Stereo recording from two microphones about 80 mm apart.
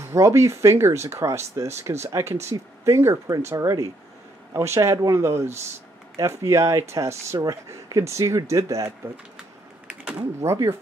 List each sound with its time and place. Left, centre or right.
0.0 s speech: right
9.8 s typing: centre
10.4 s speech: right